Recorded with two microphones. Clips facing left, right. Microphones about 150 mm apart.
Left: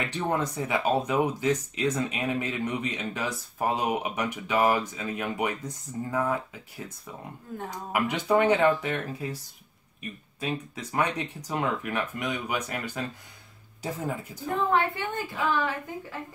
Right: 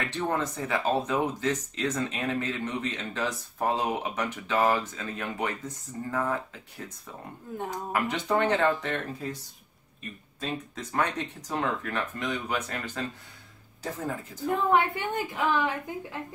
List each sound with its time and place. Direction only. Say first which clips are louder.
0.1 s speech: left 1 dB; 15° left (ahead or behind)
7.9 s speech: left 3 dB; 10° left (ahead or behind)
10.4 s speech: left 2 dB; 10° left (ahead or behind)
14.7 s a woman's voice: right 2 dB; 15° right (ahead or behind)